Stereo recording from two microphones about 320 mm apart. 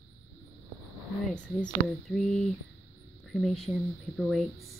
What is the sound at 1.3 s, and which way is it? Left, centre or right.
Speech, centre.